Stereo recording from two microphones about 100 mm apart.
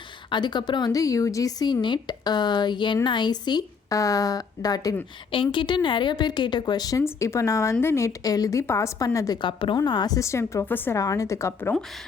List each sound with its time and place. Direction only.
0.3 s a woman's voice: 50° left (ahead or behind)
3.9 s a woman's voice: 35° left (ahead or behind)
5.3 s a woman's voice: 55° left (ahead or behind); by 7.0 s 40° left (ahead or behind)
7.0 s a woman's voice: 30° left (ahead or behind)
9.4 s a woman's voice: 55° left (ahead or behind)
10.2 s speech: 30° left (ahead or behind)
10.9 s a woman's voice: 35° left (ahead or behind)